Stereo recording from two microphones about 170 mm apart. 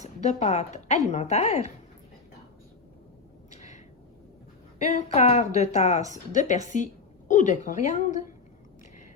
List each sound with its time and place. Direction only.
0.0 s a woman's voice: 45° left (ahead or behind)
3.5 s a sound: 45° left (ahead or behind)
4.8 s a woman's voice: 40° left (ahead or behind)